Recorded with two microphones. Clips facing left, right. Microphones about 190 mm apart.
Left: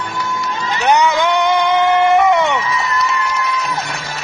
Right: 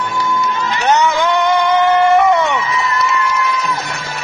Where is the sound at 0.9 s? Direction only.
15° left (ahead or behind).